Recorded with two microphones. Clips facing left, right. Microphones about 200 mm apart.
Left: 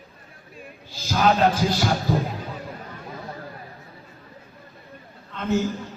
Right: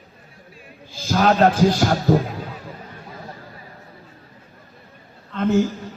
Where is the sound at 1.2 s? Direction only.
50° right (ahead or behind).